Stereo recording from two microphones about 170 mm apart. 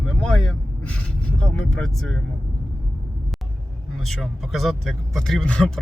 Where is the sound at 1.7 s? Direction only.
Centre (ahead or behind).